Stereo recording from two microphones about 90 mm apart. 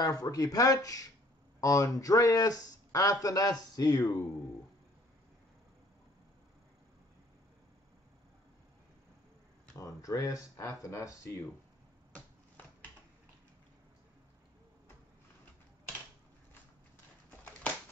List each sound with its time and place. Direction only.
0.0 s speech: 45° left (ahead or behind)
9.8 s speech: 40° left (ahead or behind)